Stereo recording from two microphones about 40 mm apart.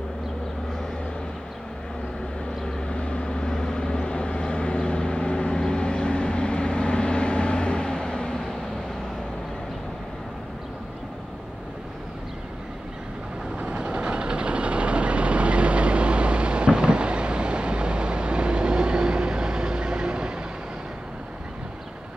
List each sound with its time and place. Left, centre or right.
2.9 s vehicle: left
13.6 s vehicle: right